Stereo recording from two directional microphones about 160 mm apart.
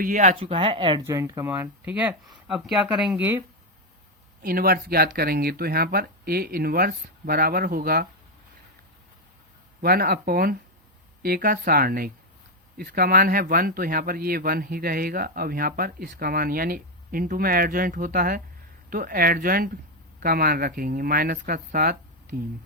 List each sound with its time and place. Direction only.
0.0 s speech: 50° right (ahead or behind)
0.3 s speech: 35° right (ahead or behind)
1.0 s speech: 20° right (ahead or behind)
4.4 s speech: 70° right (ahead or behind)
9.8 s speech: 70° right (ahead or behind)